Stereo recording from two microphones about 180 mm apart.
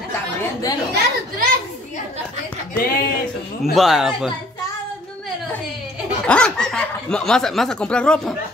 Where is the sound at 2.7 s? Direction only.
55° left (ahead or behind).